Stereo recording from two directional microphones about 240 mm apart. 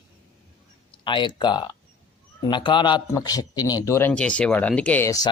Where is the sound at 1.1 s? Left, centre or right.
Centre.